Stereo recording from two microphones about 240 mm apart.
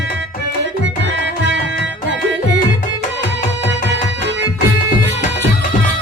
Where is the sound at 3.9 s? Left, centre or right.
Right.